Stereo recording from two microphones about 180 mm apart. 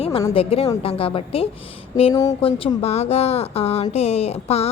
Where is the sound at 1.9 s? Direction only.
20° left (ahead or behind).